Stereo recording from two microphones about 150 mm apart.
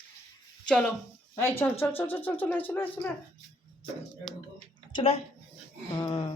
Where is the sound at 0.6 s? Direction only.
5° left (ahead or behind).